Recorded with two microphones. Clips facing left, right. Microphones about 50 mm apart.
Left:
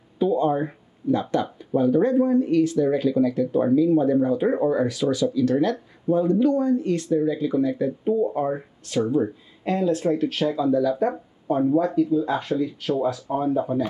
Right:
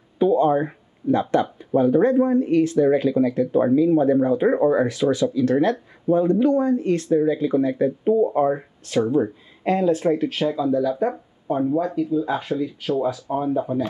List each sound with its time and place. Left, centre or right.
0.2 s speech: right
10.2 s speech: centre